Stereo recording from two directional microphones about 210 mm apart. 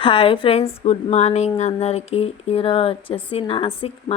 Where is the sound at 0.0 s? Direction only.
25° left (ahead or behind).